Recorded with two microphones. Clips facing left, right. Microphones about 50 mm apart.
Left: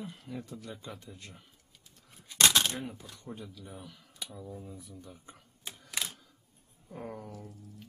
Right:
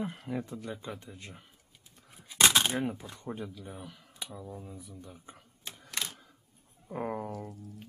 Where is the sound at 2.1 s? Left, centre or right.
Centre.